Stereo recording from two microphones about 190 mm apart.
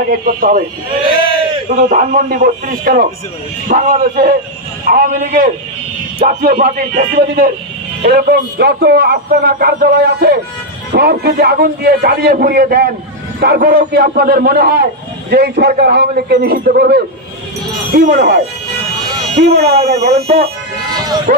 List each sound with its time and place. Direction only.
0.1 s speech: 45° right (ahead or behind)
1.0 s a sound: 25° right (ahead or behind)
1.9 s a man's voice: 50° right (ahead or behind)
19.3 s a man's voice: 60° right (ahead or behind)
20.2 s speech: 30° right (ahead or behind)
21.3 s speech: 50° right (ahead or behind)